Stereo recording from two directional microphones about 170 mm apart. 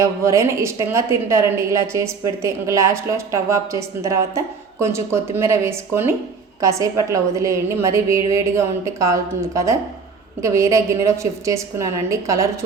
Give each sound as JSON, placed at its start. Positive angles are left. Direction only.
{"t": 0.0, "sound": "a woman's voice", "side_deg": -15}